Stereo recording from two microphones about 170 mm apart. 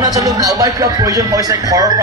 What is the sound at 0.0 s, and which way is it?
A man's voice, 20° right (ahead or behind).